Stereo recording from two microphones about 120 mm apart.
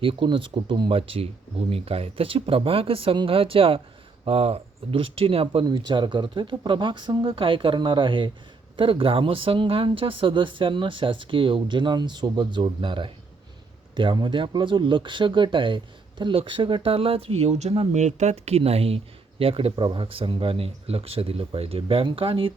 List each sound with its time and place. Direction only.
0.0 s speech: 45° right (ahead or behind)
5.6 s speech: 40° right (ahead or behind)